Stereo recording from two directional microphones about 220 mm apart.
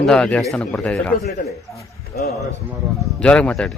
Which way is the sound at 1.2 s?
30° left (ahead or behind).